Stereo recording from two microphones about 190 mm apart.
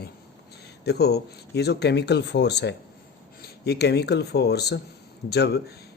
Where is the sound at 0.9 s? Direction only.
60° left (ahead or behind).